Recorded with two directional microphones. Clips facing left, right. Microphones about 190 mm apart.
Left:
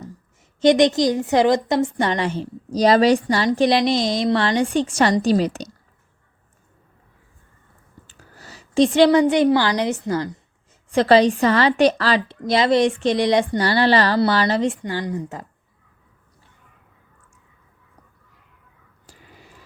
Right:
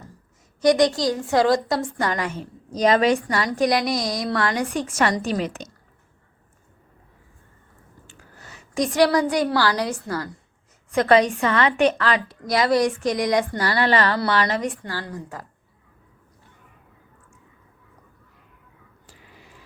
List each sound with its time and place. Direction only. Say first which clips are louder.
0.6 s a woman's voice: left 3 dB; 25° left (ahead or behind)
8.0 s a woman's voice: left 1 dB; 35° left (ahead or behind)
10.9 s a woman's voice: left 3 dB; 30° left (ahead or behind)
14.8 s a woman's voice: left 6 dB; 15° left (ahead or behind)